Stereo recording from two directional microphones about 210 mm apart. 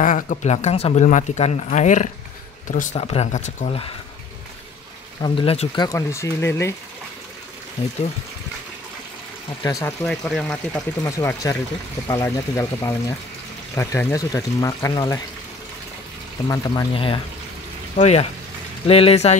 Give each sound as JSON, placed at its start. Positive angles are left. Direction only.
{"t": 0.0, "sound": "speech", "side_deg": 40}
{"t": 5.2, "sound": "speech", "side_deg": 25}
{"t": 5.9, "sound": "speech", "side_deg": 15}
{"t": 9.6, "sound": "speech", "side_deg": 15}
{"t": 10.0, "sound": "speech", "side_deg": 5}
{"t": 11.1, "sound": "speech", "side_deg": 15}
{"t": 16.4, "sound": "speech", "side_deg": 20}